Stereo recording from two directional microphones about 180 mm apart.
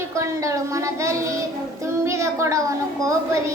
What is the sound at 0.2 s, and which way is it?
A woman's voice, 15° right (ahead or behind).